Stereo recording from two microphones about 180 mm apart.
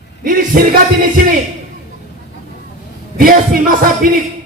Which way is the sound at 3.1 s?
50° right (ahead or behind).